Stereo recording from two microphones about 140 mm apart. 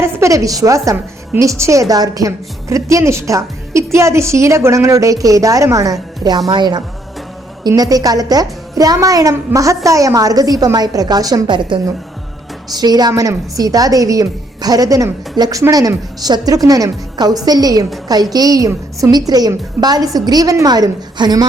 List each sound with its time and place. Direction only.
0.0 s a woman's voice: 20° right (ahead or behind)